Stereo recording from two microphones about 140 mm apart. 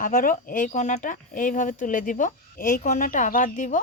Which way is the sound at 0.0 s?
70° left (ahead or behind).